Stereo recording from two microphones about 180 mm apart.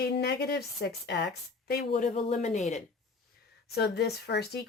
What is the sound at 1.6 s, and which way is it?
Speech, 55° left (ahead or behind).